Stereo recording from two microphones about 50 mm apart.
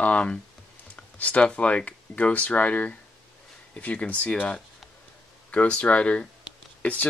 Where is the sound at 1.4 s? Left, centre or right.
Left.